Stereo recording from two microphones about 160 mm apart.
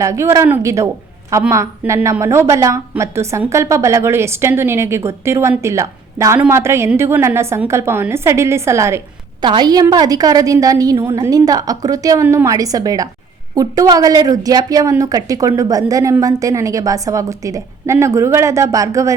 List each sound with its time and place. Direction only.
0.0 s a woman's voice: 20° right (ahead or behind)
9.4 s a woman's voice: 30° right (ahead or behind)